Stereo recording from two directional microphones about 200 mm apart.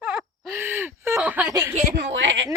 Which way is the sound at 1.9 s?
60° right (ahead or behind).